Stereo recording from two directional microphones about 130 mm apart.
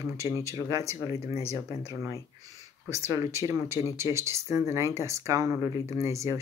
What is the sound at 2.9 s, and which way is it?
Speech, 20° right (ahead or behind).